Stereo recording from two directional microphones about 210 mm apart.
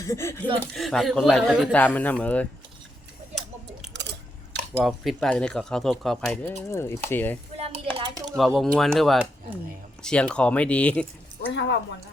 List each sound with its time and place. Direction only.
0.0 s speech: 15° left (ahead or behind)
0.7 s speech: centre (ahead or behind)
3.9 s a sound: 55° right (ahead or behind)
4.7 s speech: centre (ahead or behind)
7.5 s a sound: 30° right (ahead or behind)
7.9 s typing: 20° right (ahead or behind)
8.4 s speech: centre (ahead or behind)